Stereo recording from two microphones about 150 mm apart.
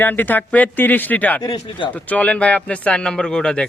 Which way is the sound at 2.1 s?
10° left (ahead or behind).